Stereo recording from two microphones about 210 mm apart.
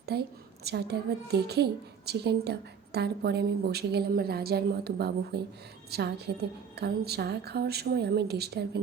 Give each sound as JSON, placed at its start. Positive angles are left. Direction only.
{"t": 0.0, "sound": "a child's voice", "side_deg": -50}